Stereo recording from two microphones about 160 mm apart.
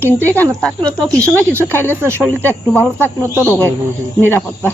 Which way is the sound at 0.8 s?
20° right (ahead or behind).